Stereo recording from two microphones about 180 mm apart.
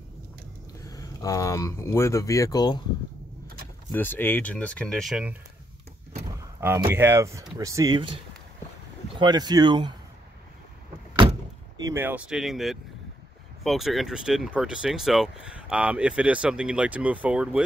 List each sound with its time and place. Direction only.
0.7 s speech: 20° left (ahead or behind)
3.9 s speech: 10° left (ahead or behind)
6.6 s speech: 10° right (ahead or behind)
9.1 s speech: 25° right (ahead or behind)
11.7 s speech: 15° right (ahead or behind)